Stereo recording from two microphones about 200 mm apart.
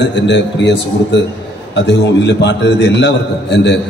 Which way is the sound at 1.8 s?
60° left (ahead or behind).